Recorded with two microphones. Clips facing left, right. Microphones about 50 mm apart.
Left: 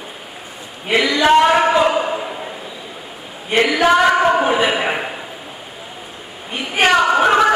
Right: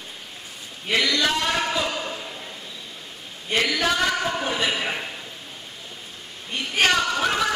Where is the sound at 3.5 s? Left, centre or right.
Left.